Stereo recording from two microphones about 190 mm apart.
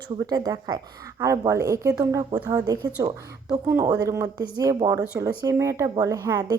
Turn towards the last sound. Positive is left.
turn(degrees=-20)  # may be behind; listen again after turning